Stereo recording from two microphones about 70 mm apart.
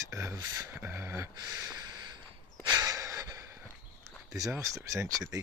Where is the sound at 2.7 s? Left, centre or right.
Right.